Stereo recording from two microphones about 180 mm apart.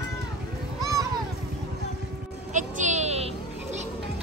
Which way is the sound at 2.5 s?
45° right (ahead or behind).